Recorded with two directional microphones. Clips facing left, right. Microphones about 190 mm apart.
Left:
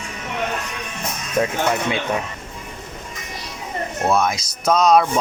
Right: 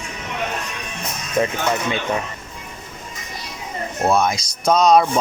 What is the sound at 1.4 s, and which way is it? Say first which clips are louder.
Speech: right 1 dB; centre (ahead or behind).